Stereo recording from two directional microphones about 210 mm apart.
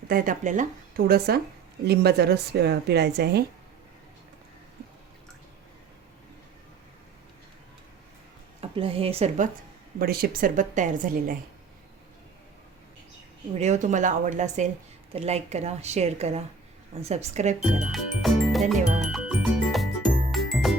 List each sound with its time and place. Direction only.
0.1 s a woman's voice: 40° right (ahead or behind)
8.7 s speech: 25° right (ahead or behind)
10.0 s a woman's voice: 45° right (ahead or behind)
13.5 s a woman's voice: 35° right (ahead or behind)
17.6 s music: centre (ahead or behind)